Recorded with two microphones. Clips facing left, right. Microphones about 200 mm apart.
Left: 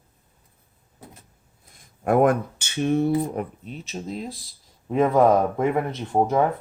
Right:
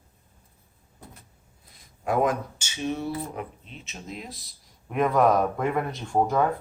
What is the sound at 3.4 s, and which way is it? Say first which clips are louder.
Speech: left 6 dB; 45° left (ahead or behind).